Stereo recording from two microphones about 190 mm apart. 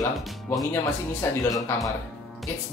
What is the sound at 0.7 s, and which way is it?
Speech, 15° left (ahead or behind).